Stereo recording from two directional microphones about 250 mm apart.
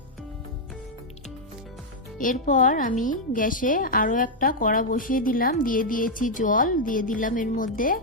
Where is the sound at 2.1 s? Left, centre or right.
Left.